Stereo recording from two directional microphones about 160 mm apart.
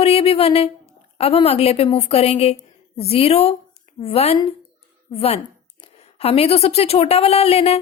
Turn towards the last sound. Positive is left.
turn(degrees=40)  # may be behind; listen again after turning